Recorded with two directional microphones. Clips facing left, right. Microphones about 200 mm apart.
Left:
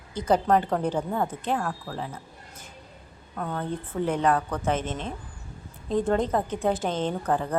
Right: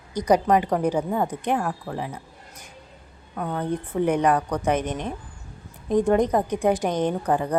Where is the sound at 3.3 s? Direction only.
15° right (ahead or behind).